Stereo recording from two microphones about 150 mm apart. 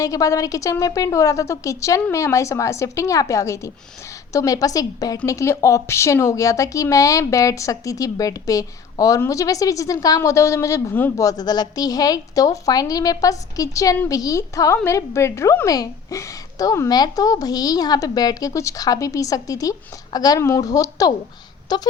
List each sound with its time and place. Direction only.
0.0 s a woman's voice: 20° left (ahead or behind)